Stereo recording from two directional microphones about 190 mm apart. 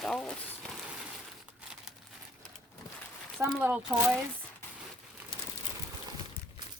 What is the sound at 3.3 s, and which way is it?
Speech, 10° right (ahead or behind).